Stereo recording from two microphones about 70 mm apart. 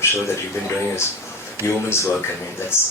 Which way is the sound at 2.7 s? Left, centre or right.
Left.